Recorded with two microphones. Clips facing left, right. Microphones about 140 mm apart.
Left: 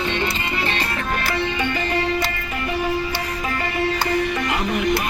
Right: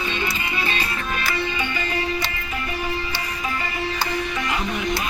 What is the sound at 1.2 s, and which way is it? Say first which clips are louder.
Music: left 2 dB; 60° left (ahead or behind).